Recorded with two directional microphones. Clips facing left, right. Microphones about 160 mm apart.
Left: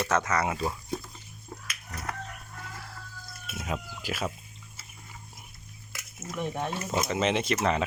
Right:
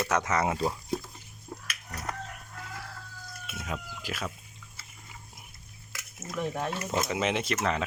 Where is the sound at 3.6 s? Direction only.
10° left (ahead or behind).